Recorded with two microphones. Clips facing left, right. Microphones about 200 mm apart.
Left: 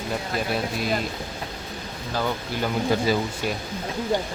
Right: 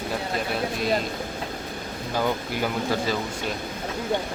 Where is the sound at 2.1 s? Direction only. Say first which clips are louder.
Right 1 dB; 15° right (ahead or behind).